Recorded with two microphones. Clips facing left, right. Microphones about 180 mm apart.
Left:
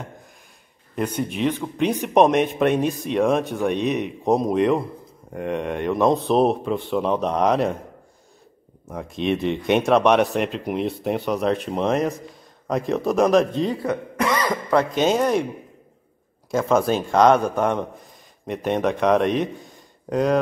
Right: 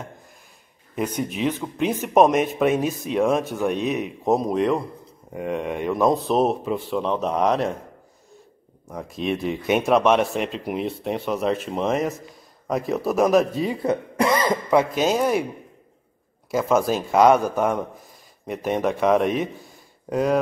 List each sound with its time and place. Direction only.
0.9 s speech: 5° right (ahead or behind)
8.8 s speech: centre (ahead or behind)
13.8 s cough: 30° right (ahead or behind)
14.7 s speech: 10° right (ahead or behind)
16.4 s speech: 5° right (ahead or behind)